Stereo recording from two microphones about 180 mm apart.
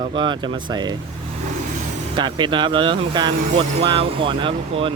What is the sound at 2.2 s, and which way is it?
Speech, 25° right (ahead or behind).